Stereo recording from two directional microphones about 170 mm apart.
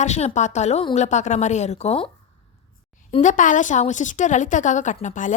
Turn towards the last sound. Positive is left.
turn(degrees=45)  # may be behind; listen again after turning